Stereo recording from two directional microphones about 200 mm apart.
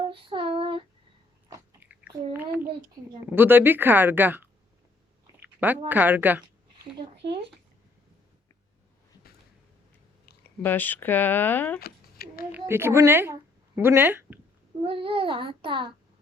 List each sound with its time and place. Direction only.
0.1 s child singing: 25° right (ahead or behind)
1.5 s a sound: 15° right (ahead or behind)
3.2 s speech: 10° right (ahead or behind)
5.2 s a sound: 10° right (ahead or behind)
5.9 s speech: 10° right (ahead or behind)
10.6 s speech: 10° left (ahead or behind)
11.8 s a sound: 50° left (ahead or behind)
12.5 s speech: 10° right (ahead or behind)
14.8 s a child's voice: 25° right (ahead or behind)